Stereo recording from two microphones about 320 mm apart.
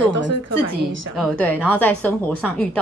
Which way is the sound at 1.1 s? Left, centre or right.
Centre.